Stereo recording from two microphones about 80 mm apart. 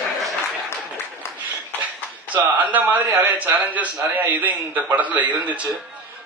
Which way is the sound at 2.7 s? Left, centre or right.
Right.